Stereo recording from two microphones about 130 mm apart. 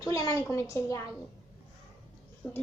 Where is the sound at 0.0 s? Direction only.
25° left (ahead or behind).